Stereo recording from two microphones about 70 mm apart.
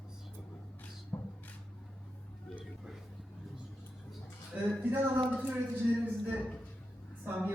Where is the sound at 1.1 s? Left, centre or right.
Centre.